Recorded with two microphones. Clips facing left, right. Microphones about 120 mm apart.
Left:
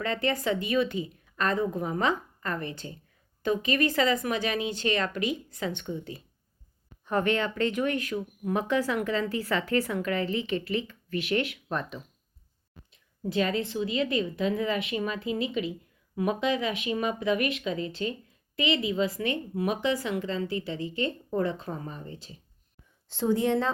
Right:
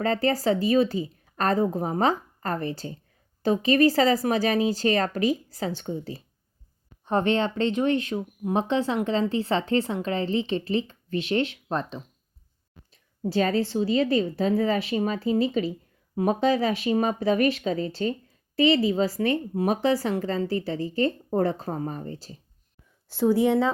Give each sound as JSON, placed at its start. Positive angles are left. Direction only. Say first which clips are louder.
{"t": 0.0, "sound": "speech", "louder": "right 5 dB", "side_deg": -35}
{"t": 23.0, "sound": "speech", "louder": "right 4 dB", "side_deg": -10}